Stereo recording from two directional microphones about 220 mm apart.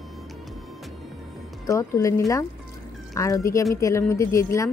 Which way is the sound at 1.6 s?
15° left (ahead or behind).